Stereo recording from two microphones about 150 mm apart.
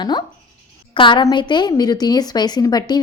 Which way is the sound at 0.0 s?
30° left (ahead or behind).